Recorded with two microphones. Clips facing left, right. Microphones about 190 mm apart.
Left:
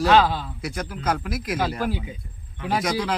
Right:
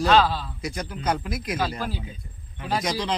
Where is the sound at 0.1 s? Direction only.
15° left (ahead or behind).